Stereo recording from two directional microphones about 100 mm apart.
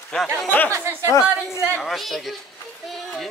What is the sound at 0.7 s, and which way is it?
Speech, 30° right (ahead or behind).